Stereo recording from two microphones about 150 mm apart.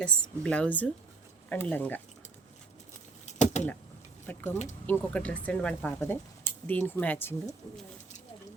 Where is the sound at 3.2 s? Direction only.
50° left (ahead or behind).